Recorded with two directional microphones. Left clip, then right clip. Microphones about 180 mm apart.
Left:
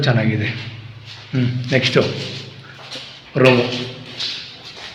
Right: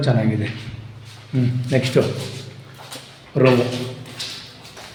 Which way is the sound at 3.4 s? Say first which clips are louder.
Left 3 dB; 10° right (ahead or behind).